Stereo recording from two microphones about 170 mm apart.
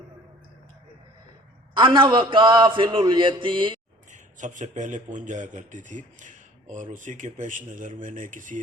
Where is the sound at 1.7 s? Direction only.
30° right (ahead or behind).